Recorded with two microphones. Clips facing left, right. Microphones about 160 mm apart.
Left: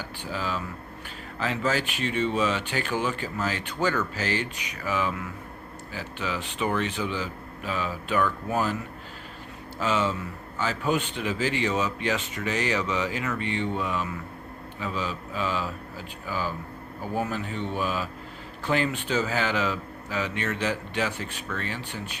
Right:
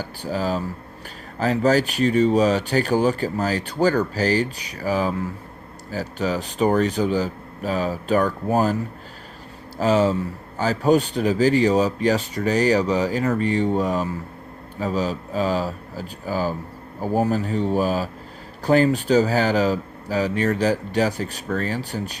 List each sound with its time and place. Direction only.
0.0 s a man's voice: 40° right (ahead or behind)